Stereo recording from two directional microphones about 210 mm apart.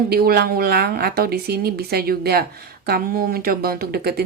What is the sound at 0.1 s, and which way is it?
A woman's voice, 45° right (ahead or behind).